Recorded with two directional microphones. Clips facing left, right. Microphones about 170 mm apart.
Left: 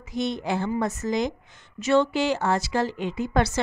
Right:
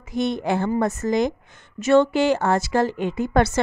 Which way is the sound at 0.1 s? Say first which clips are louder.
Right 4 dB; 55° right (ahead or behind).